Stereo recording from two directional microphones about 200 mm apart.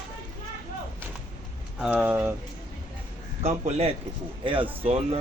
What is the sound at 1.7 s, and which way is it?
Speech, 5° right (ahead or behind).